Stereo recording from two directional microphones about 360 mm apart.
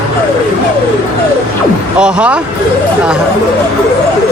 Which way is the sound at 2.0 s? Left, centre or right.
Centre.